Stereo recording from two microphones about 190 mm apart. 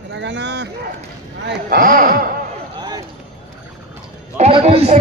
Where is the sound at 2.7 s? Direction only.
20° right (ahead or behind).